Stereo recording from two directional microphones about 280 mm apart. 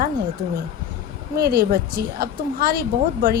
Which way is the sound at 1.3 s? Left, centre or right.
Right.